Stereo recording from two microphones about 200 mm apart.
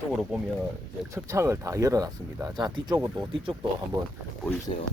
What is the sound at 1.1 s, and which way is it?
Speech, 15° right (ahead or behind).